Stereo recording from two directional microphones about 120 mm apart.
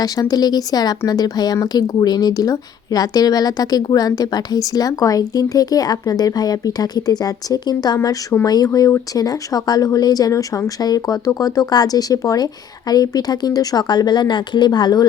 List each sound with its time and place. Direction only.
0.0 s speech: 30° left (ahead or behind)
7.9 s speech: 20° left (ahead or behind)
8.4 s speech: 30° left (ahead or behind)